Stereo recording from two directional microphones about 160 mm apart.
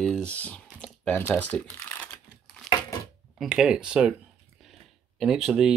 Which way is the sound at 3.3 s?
5° right (ahead or behind).